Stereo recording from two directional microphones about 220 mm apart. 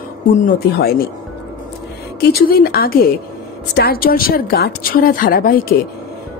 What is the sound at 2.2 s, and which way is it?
A woman's voice, 45° left (ahead or behind).